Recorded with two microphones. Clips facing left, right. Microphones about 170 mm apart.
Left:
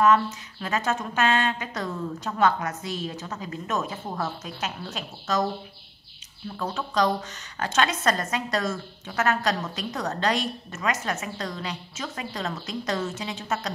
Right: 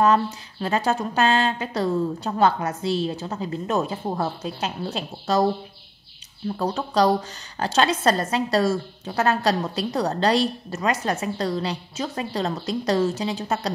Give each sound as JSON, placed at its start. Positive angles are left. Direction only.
{"t": 0.0, "sound": "a woman's voice", "side_deg": -35}
{"t": 6.5, "sound": "a woman's voice", "side_deg": -35}